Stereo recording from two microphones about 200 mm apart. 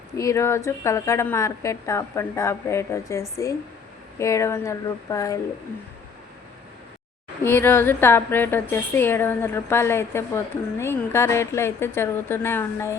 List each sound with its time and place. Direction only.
0.2 s a woman's voice: 15° left (ahead or behind)
7.4 s a woman's voice: 10° left (ahead or behind)